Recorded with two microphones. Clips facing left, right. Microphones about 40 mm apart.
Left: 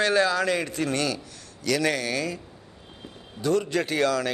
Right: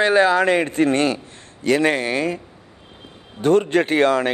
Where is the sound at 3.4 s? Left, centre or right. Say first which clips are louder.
Right 8 dB; right.